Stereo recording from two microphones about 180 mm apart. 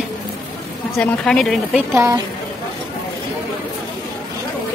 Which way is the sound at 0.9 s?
5° left (ahead or behind).